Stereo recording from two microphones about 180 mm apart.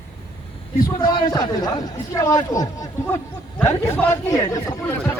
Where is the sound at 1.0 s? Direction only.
25° left (ahead or behind).